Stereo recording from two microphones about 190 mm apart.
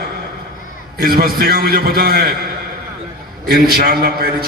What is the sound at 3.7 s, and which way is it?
Speech, 50° right (ahead or behind).